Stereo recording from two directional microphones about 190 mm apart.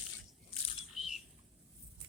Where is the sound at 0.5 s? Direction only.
30° left (ahead or behind).